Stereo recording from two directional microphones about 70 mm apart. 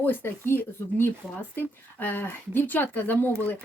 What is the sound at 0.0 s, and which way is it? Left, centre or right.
A woman's voice, left.